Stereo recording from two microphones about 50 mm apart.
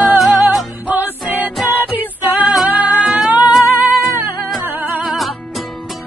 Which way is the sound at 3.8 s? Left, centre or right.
Right.